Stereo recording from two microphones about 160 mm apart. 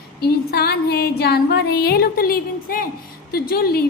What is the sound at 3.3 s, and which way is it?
Speech, 70° left (ahead or behind).